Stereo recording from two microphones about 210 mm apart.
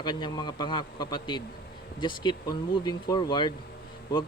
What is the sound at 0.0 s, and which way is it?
A man's voice, 20° left (ahead or behind).